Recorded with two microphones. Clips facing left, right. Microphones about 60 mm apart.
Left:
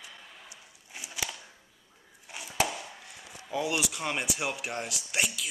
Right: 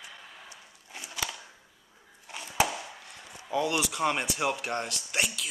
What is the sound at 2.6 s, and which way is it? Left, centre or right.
Chop, centre.